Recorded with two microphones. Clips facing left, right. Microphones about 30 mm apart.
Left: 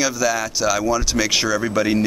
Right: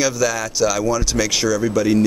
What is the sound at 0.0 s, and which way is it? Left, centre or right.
Speech, centre.